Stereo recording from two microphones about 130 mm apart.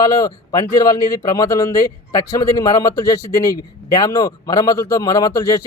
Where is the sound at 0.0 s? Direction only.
25° left (ahead or behind).